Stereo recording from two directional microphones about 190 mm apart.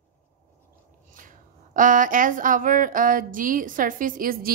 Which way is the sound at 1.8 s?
45° right (ahead or behind).